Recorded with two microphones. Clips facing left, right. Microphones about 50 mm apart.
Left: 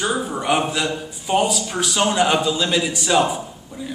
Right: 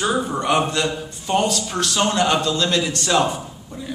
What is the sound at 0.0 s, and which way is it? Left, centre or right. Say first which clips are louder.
A man's voice: right 1 dB; centre.